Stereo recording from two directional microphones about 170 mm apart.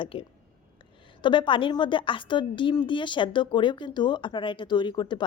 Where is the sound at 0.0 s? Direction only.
30° left (ahead or behind).